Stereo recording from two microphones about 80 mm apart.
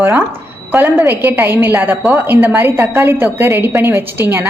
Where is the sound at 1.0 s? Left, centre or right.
Right.